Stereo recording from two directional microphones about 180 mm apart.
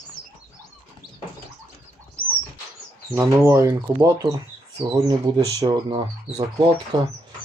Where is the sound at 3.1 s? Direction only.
15° right (ahead or behind).